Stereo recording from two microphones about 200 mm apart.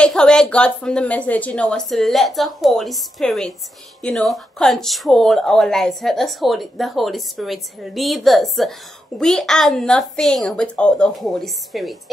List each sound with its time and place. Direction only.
0.0 s speech: 5° left (ahead or behind)